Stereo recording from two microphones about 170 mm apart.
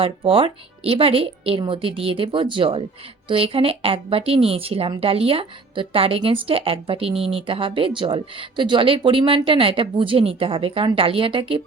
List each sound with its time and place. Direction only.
0.0 s a woman's voice: 30° right (ahead or behind)